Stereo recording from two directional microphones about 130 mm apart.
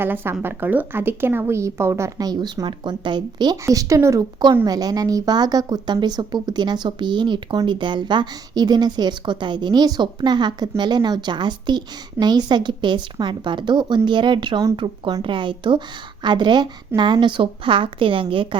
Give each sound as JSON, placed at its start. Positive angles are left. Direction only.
{"t": 0.0, "sound": "a woman's voice", "side_deg": -15}